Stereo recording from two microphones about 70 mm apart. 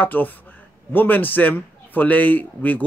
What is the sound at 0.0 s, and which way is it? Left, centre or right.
Speech, left.